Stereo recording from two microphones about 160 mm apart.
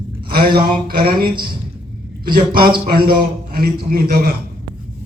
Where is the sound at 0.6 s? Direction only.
65° right (ahead or behind).